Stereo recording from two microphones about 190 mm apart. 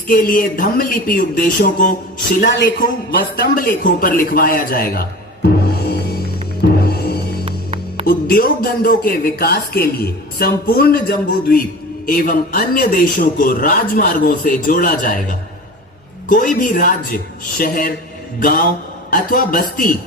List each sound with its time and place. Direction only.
0.1 s speech: 50° left (ahead or behind)
6.8 s music: 55° left (ahead or behind)
7.4 s music: 30° right (ahead or behind)
8.0 s speech: 50° left (ahead or behind)
19.1 s speech: 45° left (ahead or behind)